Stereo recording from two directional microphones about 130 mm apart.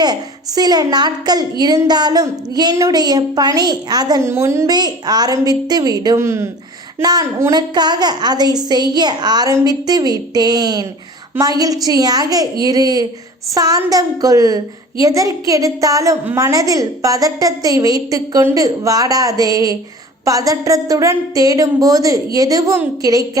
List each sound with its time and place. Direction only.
0.0 s a woman's voice: 30° right (ahead or behind)